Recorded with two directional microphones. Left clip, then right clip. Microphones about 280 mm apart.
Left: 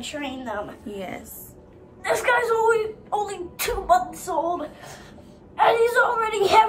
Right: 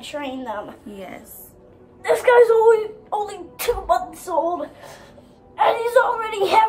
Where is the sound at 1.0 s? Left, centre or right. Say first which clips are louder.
Left 3 dB; centre.